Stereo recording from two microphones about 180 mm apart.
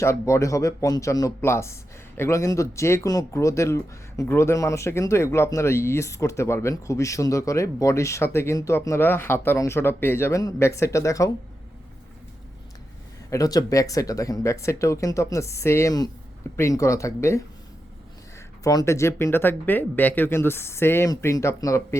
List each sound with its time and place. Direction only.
0.0 s speech: 15° left (ahead or behind)
13.3 s speech: 20° left (ahead or behind)